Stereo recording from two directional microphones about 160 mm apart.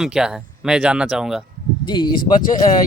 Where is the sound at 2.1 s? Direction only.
60° left (ahead or behind).